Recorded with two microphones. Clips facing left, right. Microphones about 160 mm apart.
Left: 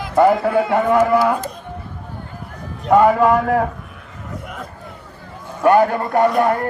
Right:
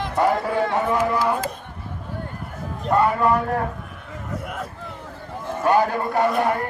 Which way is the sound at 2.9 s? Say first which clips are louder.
Left 6 dB; 90° left.